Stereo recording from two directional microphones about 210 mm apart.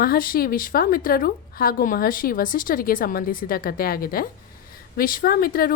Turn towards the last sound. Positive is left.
turn(degrees=45)  # may be behind; listen again after turning